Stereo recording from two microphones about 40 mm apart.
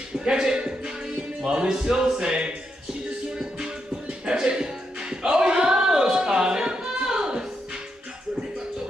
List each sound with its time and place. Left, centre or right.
0.2 s music: centre
4.3 s music: right